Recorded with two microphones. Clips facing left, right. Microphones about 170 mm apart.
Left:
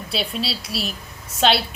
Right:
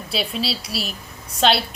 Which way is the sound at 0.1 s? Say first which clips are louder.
Right 1 dB; centre (ahead or behind).